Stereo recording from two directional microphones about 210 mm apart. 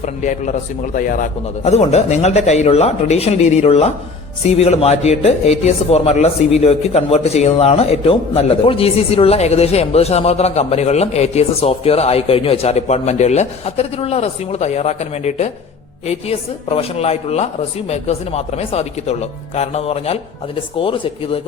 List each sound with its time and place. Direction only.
0.0 s speech: 35° left (ahead or behind)